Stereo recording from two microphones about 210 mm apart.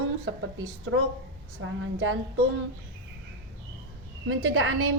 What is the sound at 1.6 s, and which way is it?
Speech, 70° right (ahead or behind).